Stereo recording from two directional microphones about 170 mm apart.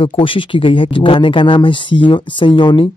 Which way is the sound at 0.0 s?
30° left (ahead or behind).